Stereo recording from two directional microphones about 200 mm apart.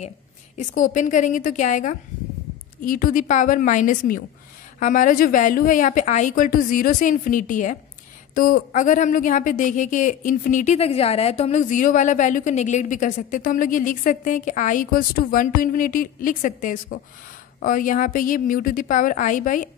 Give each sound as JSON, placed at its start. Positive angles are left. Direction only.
{"t": 0.6, "sound": "a woman's voice", "side_deg": 40}